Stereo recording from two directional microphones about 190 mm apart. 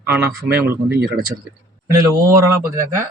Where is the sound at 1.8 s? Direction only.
15° right (ahead or behind).